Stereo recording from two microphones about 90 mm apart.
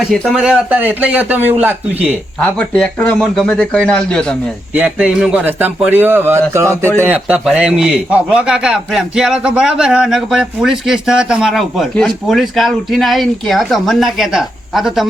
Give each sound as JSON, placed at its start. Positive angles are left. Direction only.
{"t": 0.3, "sound": "speech", "side_deg": -10}
{"t": 2.4, "sound": "speech", "side_deg": 15}
{"t": 4.7, "sound": "a man's voice", "side_deg": -15}
{"t": 7.0, "sound": "a man's voice", "side_deg": -15}